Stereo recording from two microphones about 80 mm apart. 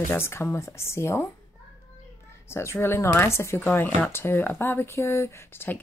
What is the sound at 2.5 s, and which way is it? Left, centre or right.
Speech, left.